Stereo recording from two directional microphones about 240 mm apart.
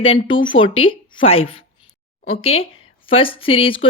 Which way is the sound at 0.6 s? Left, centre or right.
Left.